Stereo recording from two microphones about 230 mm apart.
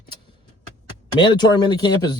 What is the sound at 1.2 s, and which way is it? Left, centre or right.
Speech, centre.